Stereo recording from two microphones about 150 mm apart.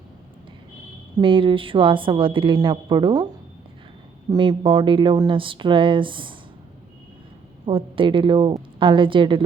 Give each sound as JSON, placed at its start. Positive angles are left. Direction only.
{"t": 1.2, "sound": "a woman's voice", "side_deg": -35}
{"t": 4.3, "sound": "a woman's voice", "side_deg": -30}
{"t": 7.6, "sound": "a woman's voice", "side_deg": -35}